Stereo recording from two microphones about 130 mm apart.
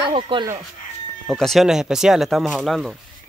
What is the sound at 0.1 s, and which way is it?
Speech, 40° right (ahead or behind).